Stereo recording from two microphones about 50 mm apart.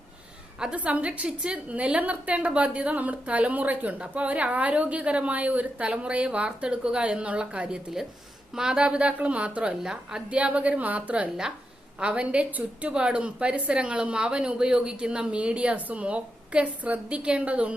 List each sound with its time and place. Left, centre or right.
0.8 s a woman's voice: right
10.2 s a woman's voice: right
12.9 s a woman's voice: centre